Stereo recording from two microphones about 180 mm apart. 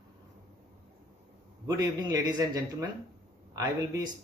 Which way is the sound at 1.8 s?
20° right (ahead or behind).